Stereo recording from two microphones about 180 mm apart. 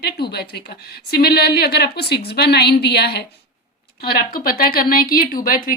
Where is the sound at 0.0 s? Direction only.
65° left (ahead or behind).